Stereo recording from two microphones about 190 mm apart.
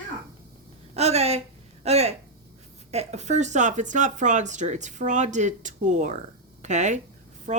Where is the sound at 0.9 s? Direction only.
35° right (ahead or behind).